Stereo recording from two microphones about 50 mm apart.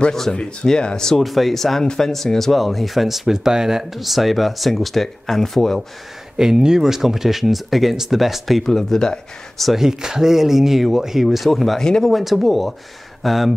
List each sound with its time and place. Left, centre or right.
0.3 s speech: centre
1.2 s speech: centre
6.3 s speech: centre
9.7 s speech: centre